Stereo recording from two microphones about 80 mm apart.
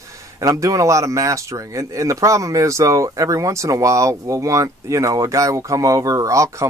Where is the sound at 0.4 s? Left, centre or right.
Right.